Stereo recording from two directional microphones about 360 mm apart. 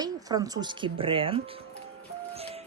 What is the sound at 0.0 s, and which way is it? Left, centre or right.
Speech, centre.